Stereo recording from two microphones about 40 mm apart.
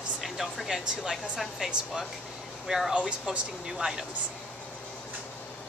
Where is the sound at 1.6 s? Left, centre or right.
Centre.